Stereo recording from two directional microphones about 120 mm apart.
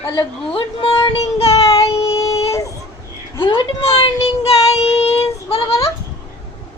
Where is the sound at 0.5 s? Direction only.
45° left (ahead or behind).